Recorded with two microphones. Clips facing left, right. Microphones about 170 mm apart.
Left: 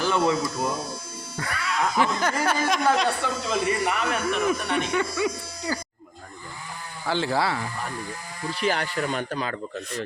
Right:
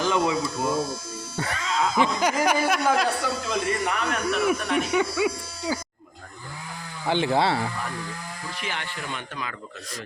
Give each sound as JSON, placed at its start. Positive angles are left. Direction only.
{"t": 0.0, "sound": "a sound", "side_deg": -15}
{"t": 1.4, "sound": "a man's voice", "side_deg": -25}
{"t": 4.4, "sound": "a man's voice", "side_deg": -5}
{"t": 7.1, "sound": "speech", "side_deg": -20}
{"t": 8.6, "sound": "speech", "side_deg": 40}